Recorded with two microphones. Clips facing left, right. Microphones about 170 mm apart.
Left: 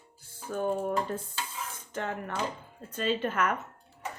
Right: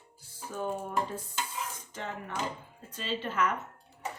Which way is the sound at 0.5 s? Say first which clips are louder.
Left 4 dB; 55° left (ahead or behind).